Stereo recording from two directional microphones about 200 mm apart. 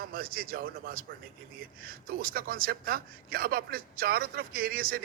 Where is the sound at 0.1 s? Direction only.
45° right (ahead or behind).